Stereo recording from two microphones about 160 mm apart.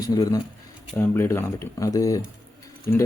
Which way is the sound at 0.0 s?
25° left (ahead or behind).